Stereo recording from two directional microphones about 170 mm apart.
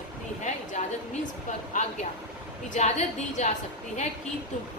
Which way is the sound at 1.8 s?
45° left (ahead or behind).